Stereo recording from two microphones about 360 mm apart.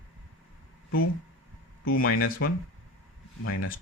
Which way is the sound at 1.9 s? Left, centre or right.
Left.